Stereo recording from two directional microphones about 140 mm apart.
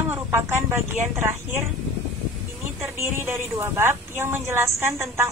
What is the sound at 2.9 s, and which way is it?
A woman's voice, 15° right (ahead or behind).